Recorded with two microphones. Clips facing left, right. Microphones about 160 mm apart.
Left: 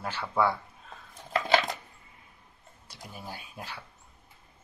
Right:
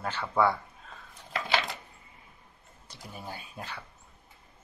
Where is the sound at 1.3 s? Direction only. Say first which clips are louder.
Left 5 dB; 45° left (ahead or behind).